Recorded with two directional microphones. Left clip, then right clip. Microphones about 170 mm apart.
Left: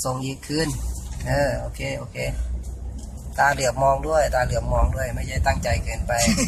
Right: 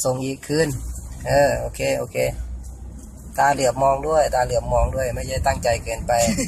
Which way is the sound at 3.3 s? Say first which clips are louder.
Right 2 dB; 40° right (ahead or behind).